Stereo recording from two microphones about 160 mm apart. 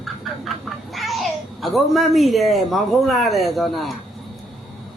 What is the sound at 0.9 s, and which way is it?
Babbling, centre (ahead or behind).